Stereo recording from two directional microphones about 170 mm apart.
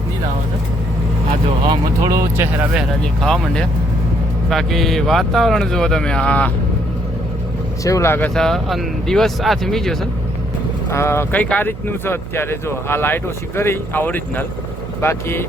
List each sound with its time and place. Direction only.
1.7 s speech: 20° right (ahead or behind)
2.7 s speech: centre (ahead or behind)
7.9 s speech: 15° left (ahead or behind)
10.9 s speech: 15° left (ahead or behind)